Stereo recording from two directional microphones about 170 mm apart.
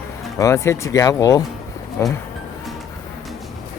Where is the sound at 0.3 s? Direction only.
15° left (ahead or behind).